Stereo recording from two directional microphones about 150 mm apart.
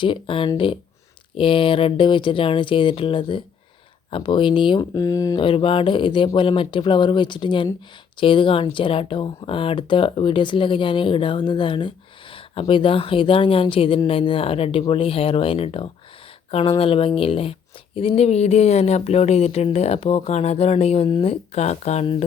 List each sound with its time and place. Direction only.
0.0 s speech: 35° left (ahead or behind)